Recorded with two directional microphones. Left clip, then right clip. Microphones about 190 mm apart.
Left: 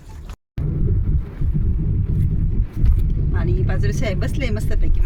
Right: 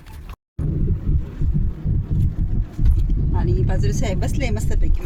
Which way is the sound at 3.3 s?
10° left (ahead or behind).